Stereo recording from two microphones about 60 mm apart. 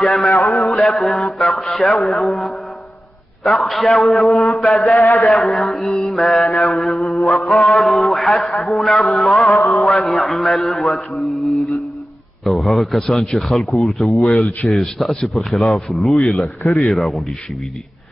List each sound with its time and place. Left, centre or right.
0.0 s a man's voice: centre
0.3 s a man's voice: left
0.7 s a man's voice: centre
5.0 s a man's voice: left
5.3 s a man's voice: centre